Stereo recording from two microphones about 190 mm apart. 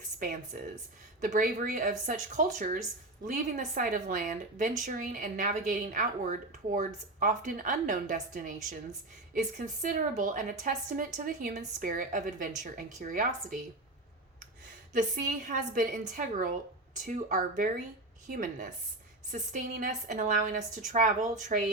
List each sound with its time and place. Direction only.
1.2 s a woman's voice: 40° right (ahead or behind)
15.4 s a woman's voice: 45° right (ahead or behind)